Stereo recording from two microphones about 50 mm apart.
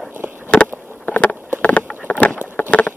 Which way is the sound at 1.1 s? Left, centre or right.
Left.